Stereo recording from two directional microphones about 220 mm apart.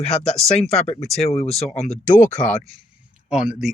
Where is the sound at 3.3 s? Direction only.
5° right (ahead or behind).